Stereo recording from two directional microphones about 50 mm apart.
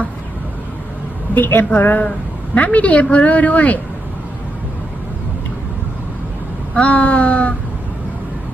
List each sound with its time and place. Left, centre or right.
1.3 s a woman's voice: left
2.6 s a woman's voice: left
6.7 s a woman's voice: left